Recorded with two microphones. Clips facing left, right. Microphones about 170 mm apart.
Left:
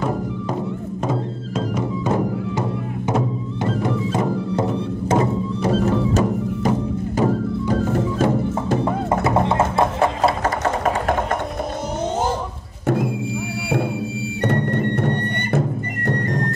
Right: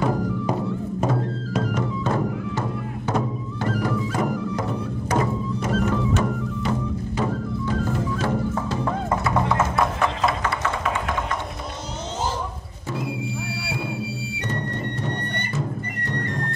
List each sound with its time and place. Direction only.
1.7 s music: 15° left (ahead or behind)
3.6 s music: 25° left (ahead or behind); by 8.7 s 45° left (ahead or behind)
8.8 s music: 25° left (ahead or behind); by 11.2 s 45° left (ahead or behind)
12.8 s music: 50° left (ahead or behind)
14.4 s music: 60° left (ahead or behind)